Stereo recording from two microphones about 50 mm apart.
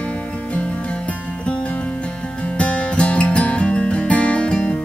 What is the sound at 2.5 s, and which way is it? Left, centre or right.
Music, left.